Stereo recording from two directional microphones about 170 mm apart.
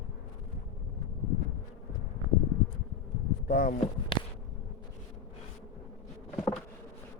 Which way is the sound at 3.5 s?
60° left (ahead or behind).